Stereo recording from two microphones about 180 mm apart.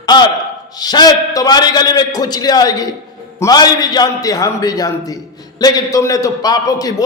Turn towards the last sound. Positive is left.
turn(degrees=20)  # may be behind; listen again after turning